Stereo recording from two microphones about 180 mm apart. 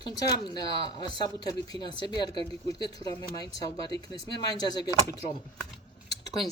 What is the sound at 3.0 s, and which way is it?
Speech, 20° left (ahead or behind).